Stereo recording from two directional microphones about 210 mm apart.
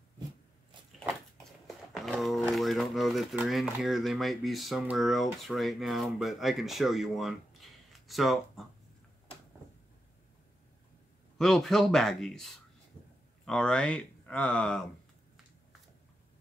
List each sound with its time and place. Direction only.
1.9 s a sound: centre (ahead or behind)
3.7 s speech: centre (ahead or behind)
11.3 s speech: centre (ahead or behind)